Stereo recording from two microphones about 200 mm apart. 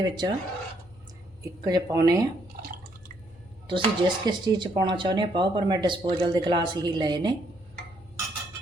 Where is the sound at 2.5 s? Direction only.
50° right (ahead or behind).